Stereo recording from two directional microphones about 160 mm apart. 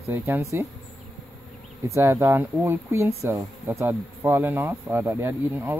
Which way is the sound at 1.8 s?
15° right (ahead or behind).